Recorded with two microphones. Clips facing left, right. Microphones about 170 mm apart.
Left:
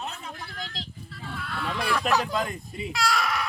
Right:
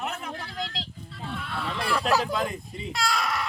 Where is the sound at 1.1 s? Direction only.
Centre (ahead or behind).